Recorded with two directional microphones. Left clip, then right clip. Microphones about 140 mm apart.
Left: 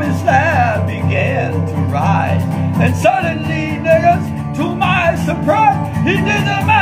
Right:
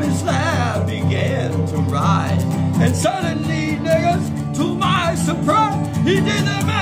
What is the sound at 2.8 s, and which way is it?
Music, 20° right (ahead or behind).